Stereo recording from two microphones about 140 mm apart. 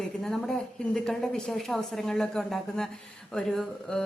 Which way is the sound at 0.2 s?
5° left (ahead or behind).